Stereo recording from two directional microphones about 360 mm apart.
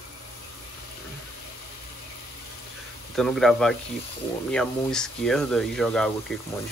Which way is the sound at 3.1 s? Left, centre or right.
Centre.